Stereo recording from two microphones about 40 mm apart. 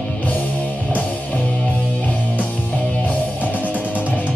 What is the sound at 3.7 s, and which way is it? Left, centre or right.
Music, right.